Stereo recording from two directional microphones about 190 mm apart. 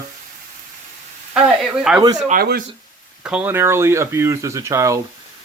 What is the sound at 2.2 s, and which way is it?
Speech, 50° right (ahead or behind).